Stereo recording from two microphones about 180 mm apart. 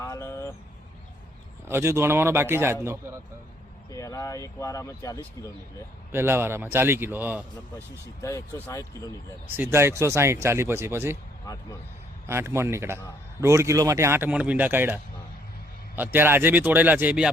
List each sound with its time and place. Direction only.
0.0 s vehicle: 15° left (ahead or behind)
1.6 s speech: 15° right (ahead or behind)
3.9 s speech: 20° left (ahead or behind)
6.1 s speech: 15° right (ahead or behind)
7.8 s speech: 15° left (ahead or behind)
9.6 s speech: 15° right (ahead or behind)
11.4 s speech: 20° left (ahead or behind)
12.2 s speech: 15° right (ahead or behind)